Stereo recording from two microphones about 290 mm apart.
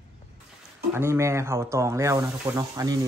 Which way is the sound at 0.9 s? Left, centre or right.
Centre.